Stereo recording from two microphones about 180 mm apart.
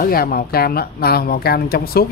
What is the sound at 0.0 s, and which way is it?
Speech, 55° left (ahead or behind).